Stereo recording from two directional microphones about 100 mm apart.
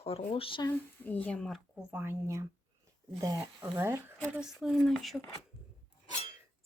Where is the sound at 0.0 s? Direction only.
80° left.